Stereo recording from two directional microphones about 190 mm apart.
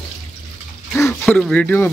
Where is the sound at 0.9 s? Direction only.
5° left (ahead or behind).